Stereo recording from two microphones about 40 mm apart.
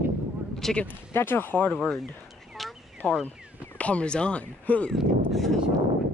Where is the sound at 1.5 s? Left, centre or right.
Left.